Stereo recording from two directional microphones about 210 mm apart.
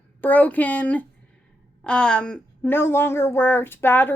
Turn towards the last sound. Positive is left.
turn(degrees=10)  # may be behind; listen again after turning